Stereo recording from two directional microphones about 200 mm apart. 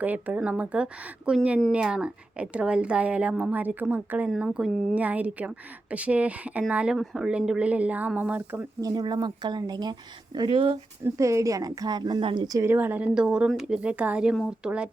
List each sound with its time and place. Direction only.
0.0 s a woman's voice: 10° right (ahead or behind)